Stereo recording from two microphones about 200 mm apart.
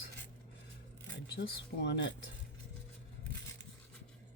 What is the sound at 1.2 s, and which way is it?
Speech, 60° left (ahead or behind).